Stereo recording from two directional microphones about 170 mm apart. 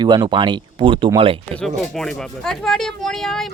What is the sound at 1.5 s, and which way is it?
Speech, centre (ahead or behind).